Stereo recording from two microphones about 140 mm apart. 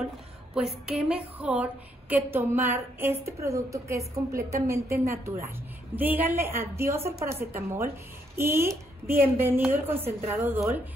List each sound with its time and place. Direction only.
0.6 s a woman's voice: 5° right (ahead or behind)